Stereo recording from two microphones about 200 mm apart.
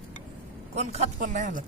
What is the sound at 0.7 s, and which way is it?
Speech, 35° right (ahead or behind).